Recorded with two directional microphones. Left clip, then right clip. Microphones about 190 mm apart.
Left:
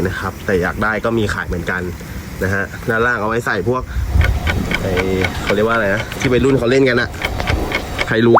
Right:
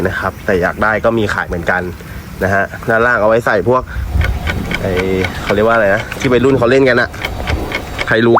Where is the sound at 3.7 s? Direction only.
Centre (ahead or behind).